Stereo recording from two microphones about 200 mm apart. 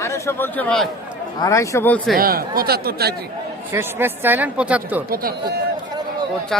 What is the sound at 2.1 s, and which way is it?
Speech, 45° right (ahead or behind).